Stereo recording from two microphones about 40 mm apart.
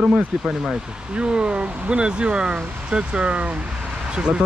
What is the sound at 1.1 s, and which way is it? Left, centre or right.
Speech, right.